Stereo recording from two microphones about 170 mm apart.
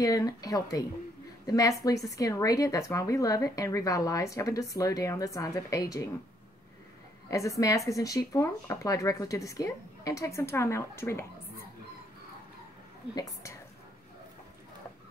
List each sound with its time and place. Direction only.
0.0 s speech: 20° left (ahead or behind)
7.2 s speech: 20° left (ahead or behind)
13.1 s speech: 20° left (ahead or behind)